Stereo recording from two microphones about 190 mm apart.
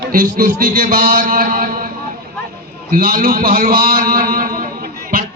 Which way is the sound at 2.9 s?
50° right (ahead or behind).